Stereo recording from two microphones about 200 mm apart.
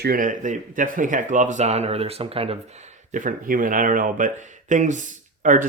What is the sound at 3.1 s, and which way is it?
Speech, 40° right (ahead or behind).